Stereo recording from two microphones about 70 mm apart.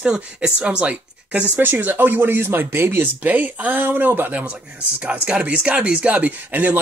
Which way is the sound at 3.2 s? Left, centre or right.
Right.